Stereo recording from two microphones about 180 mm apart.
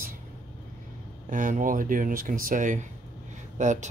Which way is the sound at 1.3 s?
50° right (ahead or behind).